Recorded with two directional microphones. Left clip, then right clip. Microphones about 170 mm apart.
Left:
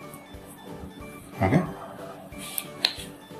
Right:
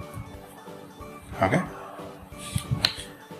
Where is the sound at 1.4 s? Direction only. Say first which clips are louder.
Right 1 dB; 35° right (ahead or behind).